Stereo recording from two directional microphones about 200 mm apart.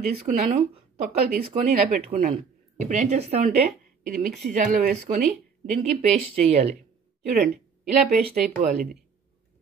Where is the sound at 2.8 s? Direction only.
35° right (ahead or behind).